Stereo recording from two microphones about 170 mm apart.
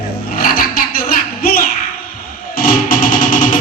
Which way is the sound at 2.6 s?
55° left (ahead or behind).